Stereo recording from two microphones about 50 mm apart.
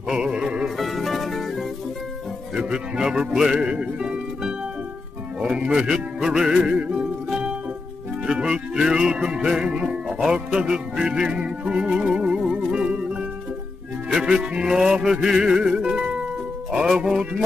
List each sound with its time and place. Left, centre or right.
0.1 s music: centre
0.7 s music: centre
2.5 s music: centre
17.0 s music: centre